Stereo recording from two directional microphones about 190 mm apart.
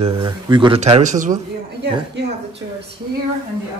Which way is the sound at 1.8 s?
65° right (ahead or behind).